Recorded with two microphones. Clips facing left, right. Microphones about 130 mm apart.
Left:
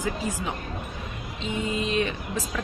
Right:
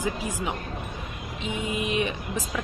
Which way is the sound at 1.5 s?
15° right (ahead or behind).